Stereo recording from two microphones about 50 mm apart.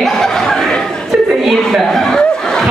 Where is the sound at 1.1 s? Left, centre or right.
Centre.